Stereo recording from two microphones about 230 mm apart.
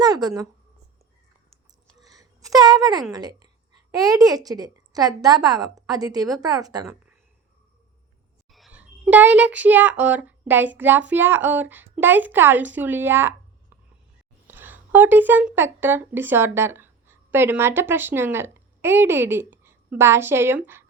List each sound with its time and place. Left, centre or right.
0.0 s a woman's voice: centre
2.0 s a sound: centre
3.1 s a woman's voice: centre
8.4 s a child's voice: centre
14.4 s speech: centre